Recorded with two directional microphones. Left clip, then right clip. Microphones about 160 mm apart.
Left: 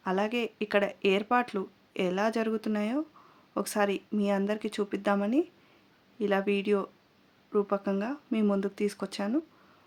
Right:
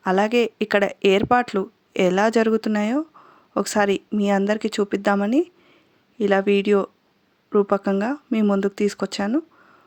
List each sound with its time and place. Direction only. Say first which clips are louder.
0.0 s speech: right 11 dB; 40° right (ahead or behind)